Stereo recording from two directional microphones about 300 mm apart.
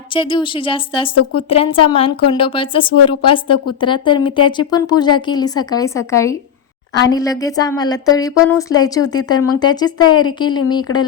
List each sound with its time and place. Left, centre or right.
0.1 s speech: centre
10.9 s speech: left